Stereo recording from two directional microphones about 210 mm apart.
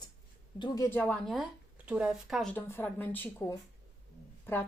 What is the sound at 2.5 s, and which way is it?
A woman's voice, 10° left (ahead or behind).